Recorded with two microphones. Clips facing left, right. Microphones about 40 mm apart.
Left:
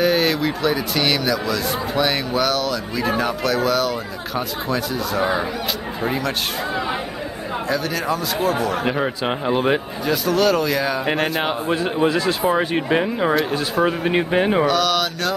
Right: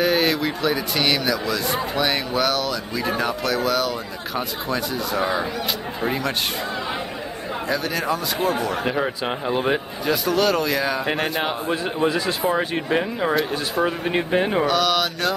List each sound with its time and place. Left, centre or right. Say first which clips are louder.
0.0 s speech: left 2 dB; centre
7.7 s speech: left 1 dB; centre
8.8 s speech: left 2 dB; centre
10.0 s speech: left 2 dB; centre
12.4 s speech: left 2 dB; centre
14.7 s speech: left 1 dB; centre